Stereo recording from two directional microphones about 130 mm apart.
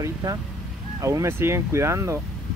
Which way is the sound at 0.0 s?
30° right (ahead or behind).